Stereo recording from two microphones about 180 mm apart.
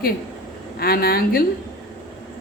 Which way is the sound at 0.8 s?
55° left (ahead or behind).